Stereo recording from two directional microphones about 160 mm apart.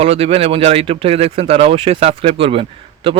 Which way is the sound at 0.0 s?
40° right (ahead or behind).